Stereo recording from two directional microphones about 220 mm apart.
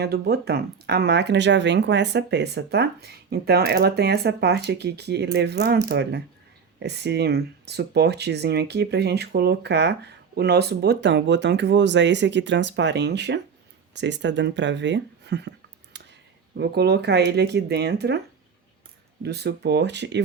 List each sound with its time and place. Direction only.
0.0 s speech: 45° right (ahead or behind)
19.2 s speech: 50° right (ahead or behind)